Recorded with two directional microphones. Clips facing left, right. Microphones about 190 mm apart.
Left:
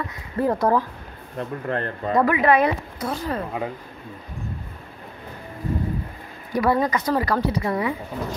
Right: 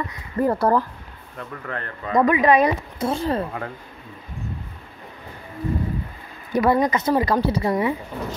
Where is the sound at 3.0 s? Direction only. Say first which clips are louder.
Right 4 dB; 25° right (ahead or behind).